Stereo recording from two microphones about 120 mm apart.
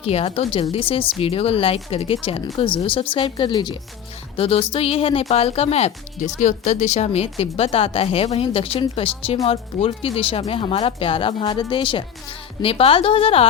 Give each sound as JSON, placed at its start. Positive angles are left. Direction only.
{"t": 0.0, "sound": "speech", "side_deg": 55}
{"t": 4.4, "sound": "speech", "side_deg": 50}
{"t": 6.4, "sound": "speech", "side_deg": 90}